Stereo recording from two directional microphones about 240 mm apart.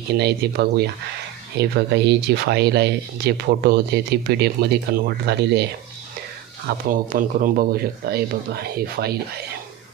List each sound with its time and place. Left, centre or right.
0.1 s speech: right
6.9 s speech: right